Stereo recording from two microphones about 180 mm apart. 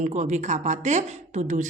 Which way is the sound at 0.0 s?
40° right (ahead or behind).